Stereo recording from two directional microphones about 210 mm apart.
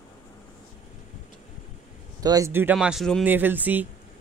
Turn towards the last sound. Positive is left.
turn(degrees=-10)  # may be behind; listen again after turning